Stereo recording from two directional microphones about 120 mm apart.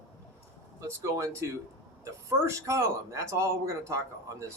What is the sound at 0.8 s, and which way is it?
Speech, 25° right (ahead or behind).